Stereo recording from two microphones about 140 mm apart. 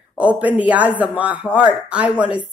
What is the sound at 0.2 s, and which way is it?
A man's voice, 10° right (ahead or behind).